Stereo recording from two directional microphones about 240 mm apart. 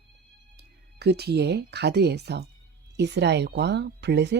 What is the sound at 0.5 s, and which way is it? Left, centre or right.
Speech, right.